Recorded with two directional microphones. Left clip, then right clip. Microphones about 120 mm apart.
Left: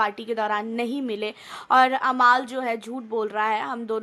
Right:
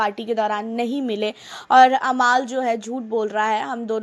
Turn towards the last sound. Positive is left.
turn(degrees=-20)  # may be behind; listen again after turning